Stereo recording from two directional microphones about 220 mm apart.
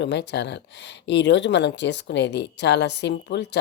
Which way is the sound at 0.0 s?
50° left (ahead or behind).